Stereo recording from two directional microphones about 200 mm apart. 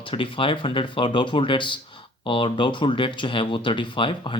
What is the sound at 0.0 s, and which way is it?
Speech, 25° left (ahead or behind).